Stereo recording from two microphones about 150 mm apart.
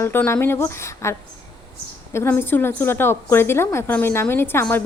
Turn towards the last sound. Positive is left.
turn(degrees=15)  # may be behind; listen again after turning